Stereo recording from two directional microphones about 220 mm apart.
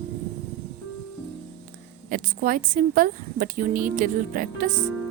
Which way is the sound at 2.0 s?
40° right (ahead or behind).